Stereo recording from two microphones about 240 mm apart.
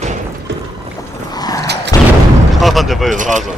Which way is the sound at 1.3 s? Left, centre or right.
Centre.